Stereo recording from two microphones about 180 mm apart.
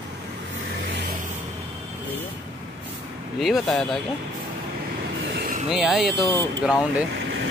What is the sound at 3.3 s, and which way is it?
Speech, centre (ahead or behind).